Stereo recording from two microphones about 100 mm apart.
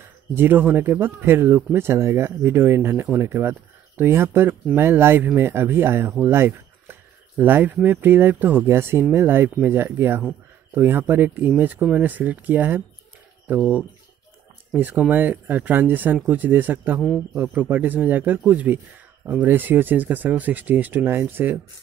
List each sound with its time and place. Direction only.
0.0 s speech: 20° right (ahead or behind)
6.2 s a sound: 20° right (ahead or behind)
7.7 s speech: 20° right (ahead or behind)
17.0 s a man's voice: centre (ahead or behind)
17.4 s speech: 15° right (ahead or behind)